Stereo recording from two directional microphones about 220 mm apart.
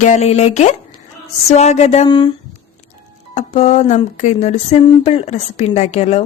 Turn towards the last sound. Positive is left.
turn(degrees=30)  # may be behind; listen again after turning